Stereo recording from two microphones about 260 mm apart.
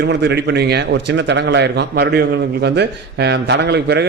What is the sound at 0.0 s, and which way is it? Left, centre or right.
A man's voice, right.